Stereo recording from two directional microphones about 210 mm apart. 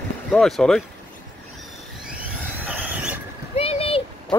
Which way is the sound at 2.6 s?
5° right (ahead or behind).